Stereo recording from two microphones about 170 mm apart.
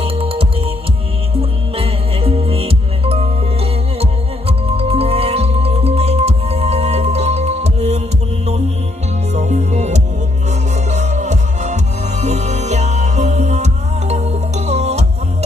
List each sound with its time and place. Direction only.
0.0 s music: 35° right (ahead or behind)
9.3 s music: 40° right (ahead or behind)